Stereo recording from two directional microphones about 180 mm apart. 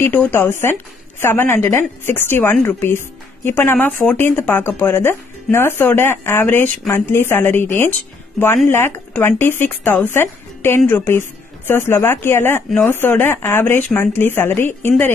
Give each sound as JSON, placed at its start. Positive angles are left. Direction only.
{"t": 0.0, "sound": "speech", "side_deg": 10}